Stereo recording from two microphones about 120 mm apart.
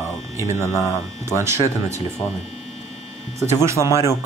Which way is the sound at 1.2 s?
20° right (ahead or behind).